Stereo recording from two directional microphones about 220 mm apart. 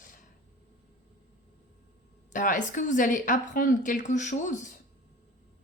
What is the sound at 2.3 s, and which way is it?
A woman's voice, 35° left (ahead or behind).